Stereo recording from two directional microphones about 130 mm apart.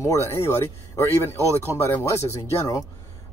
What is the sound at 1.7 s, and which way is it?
Speech, 20° left (ahead or behind).